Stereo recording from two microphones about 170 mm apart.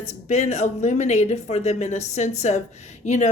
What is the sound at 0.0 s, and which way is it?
A woman's voice, 40° left (ahead or behind).